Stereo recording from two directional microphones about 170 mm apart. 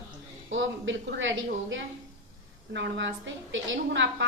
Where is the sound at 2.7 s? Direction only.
90° right.